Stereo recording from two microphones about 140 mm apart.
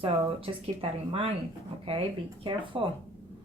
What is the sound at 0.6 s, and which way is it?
Speech, 40° right (ahead or behind).